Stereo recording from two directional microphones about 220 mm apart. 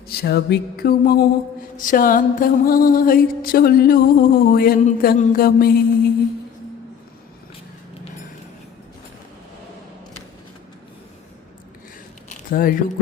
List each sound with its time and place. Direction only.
0.1 s a sound: 45° left (ahead or behind)
1.7 s mantra: 35° left (ahead or behind)
12.5 s speech: 40° left (ahead or behind)